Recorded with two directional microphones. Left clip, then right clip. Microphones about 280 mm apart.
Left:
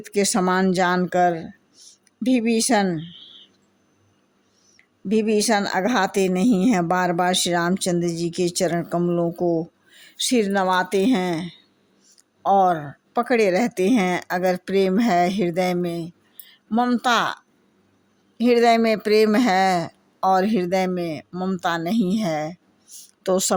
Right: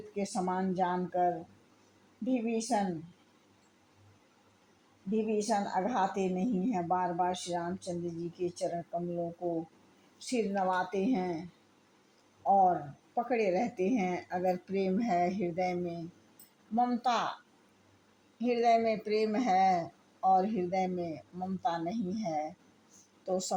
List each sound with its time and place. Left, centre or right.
0.1 s speech: left
5.1 s speech: left
10.2 s speech: left
12.5 s speech: left
18.3 s speech: left
22.9 s a sound: left
23.2 s speech: left